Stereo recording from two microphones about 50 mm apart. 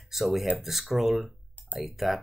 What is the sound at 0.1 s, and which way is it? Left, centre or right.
Speech, centre.